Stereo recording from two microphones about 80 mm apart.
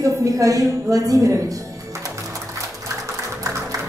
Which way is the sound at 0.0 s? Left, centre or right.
Right.